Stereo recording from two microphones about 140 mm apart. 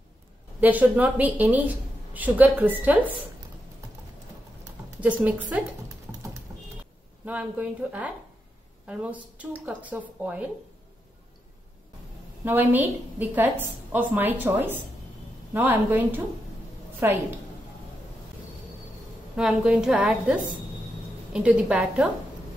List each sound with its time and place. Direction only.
0.6 s a woman's voice: 10° right (ahead or behind)
5.0 s a woman's voice: 10° right (ahead or behind)
7.2 s a woman's voice: 10° right (ahead or behind)
12.4 s a woman's voice: 15° right (ahead or behind)
19.3 s a woman's voice: 5° right (ahead or behind)